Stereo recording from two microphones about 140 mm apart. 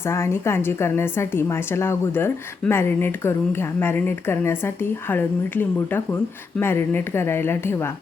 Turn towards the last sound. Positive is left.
turn(degrees=15)  # may be behind; listen again after turning